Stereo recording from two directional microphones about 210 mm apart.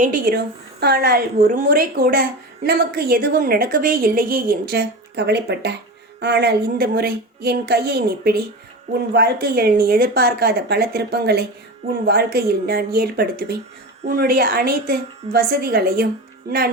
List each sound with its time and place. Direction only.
0.0 s a woman's voice: 40° right (ahead or behind)